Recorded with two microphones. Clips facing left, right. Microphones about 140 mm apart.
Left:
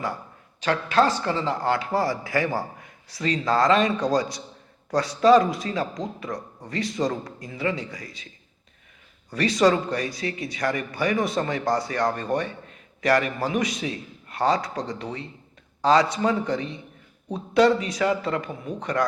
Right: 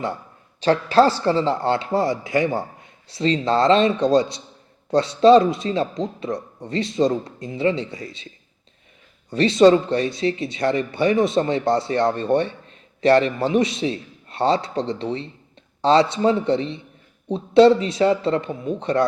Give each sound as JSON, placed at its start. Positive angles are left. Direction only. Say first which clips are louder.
{"t": 0.6, "sound": "speech", "louder": "right 5 dB", "side_deg": -30}
{"t": 9.3, "sound": "speech", "louder": "right 6 dB", "side_deg": -25}